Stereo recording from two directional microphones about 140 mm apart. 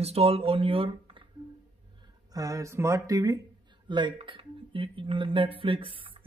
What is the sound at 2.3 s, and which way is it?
Speech, 25° right (ahead or behind).